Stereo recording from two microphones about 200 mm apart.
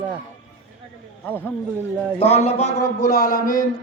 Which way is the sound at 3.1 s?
50° left (ahead or behind).